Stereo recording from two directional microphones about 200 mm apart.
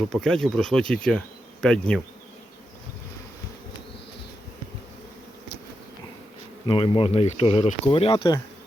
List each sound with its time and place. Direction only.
0.1 s speech: centre (ahead or behind)
6.7 s speech: 25° left (ahead or behind)